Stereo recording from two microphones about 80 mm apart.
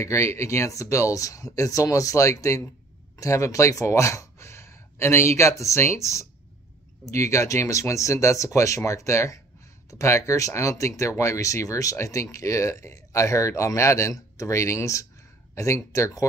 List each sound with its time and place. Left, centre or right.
0.0 s speech: left